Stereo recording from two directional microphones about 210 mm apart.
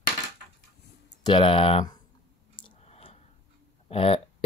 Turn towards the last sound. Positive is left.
turn(degrees=25)  # may be behind; listen again after turning